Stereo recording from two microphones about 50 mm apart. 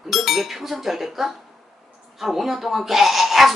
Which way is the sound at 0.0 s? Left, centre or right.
Centre.